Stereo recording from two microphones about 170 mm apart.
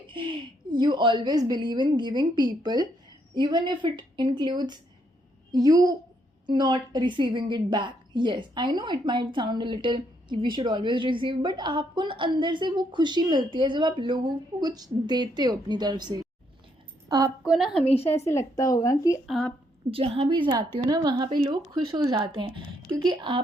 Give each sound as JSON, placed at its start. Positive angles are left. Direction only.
{"t": 0.1, "sound": "a woman's voice", "side_deg": -30}
{"t": 17.4, "sound": "a woman's voice", "side_deg": -5}
{"t": 18.0, "sound": "a woman's voice", "side_deg": 15}
{"t": 19.3, "sound": "a woman's voice", "side_deg": 5}
{"t": 19.9, "sound": "a woman's voice", "side_deg": -35}